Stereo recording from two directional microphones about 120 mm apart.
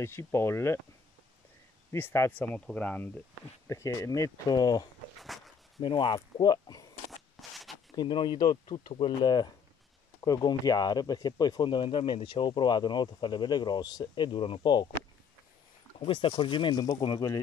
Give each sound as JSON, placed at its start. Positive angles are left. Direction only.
{"t": 0.0, "sound": "speech", "side_deg": 20}
{"t": 1.9, "sound": "speech", "side_deg": 20}
{"t": 3.6, "sound": "speech", "side_deg": 25}
{"t": 5.3, "sound": "a sound", "side_deg": 0}
{"t": 5.8, "sound": "speech", "side_deg": 40}
{"t": 7.1, "sound": "a sound", "side_deg": 0}
{"t": 7.9, "sound": "speech", "side_deg": 40}
{"t": 16.0, "sound": "speech", "side_deg": 45}